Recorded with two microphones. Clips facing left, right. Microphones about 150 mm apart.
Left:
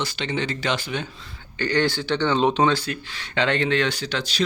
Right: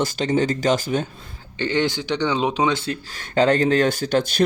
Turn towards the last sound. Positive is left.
turn(degrees=-50)  # may be behind; listen again after turning